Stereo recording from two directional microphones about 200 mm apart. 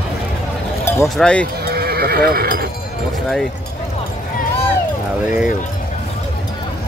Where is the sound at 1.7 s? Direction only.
50° right (ahead or behind).